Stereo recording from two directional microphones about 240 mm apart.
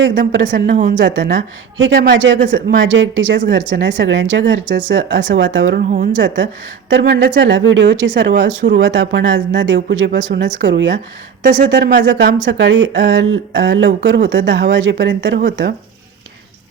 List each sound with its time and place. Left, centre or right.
0.0 s speech: right
0.7 s speech: right
0.9 s speech: right